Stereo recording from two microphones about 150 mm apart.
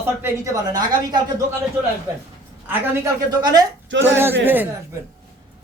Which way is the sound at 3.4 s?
25° right (ahead or behind).